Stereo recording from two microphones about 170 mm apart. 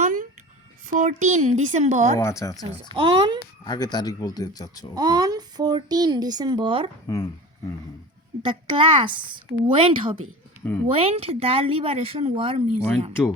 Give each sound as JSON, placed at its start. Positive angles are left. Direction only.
{"t": 0.0, "sound": "a sound", "side_deg": -50}
{"t": 0.9, "sound": "speech", "side_deg": -45}
{"t": 2.1, "sound": "speech", "side_deg": 15}
{"t": 2.9, "sound": "speech", "side_deg": -30}
{"t": 3.6, "sound": "speech", "side_deg": 25}
{"t": 4.9, "sound": "speech", "side_deg": -25}
{"t": 8.4, "sound": "speech", "side_deg": -30}